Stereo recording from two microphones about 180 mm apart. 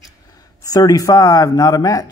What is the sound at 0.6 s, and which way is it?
Speech, 20° left (ahead or behind).